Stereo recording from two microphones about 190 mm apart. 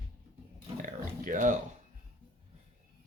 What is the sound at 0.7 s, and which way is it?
Speech, 45° right (ahead or behind).